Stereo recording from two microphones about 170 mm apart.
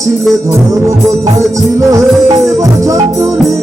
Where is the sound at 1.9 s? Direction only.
20° right (ahead or behind).